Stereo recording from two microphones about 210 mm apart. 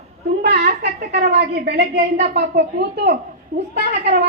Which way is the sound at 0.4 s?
50° right (ahead or behind).